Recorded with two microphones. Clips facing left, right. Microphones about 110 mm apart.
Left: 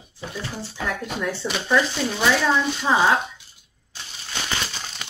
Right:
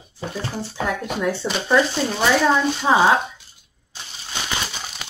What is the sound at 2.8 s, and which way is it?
Speech, 20° right (ahead or behind).